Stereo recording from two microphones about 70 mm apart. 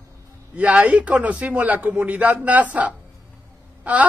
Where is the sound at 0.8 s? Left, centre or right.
Centre.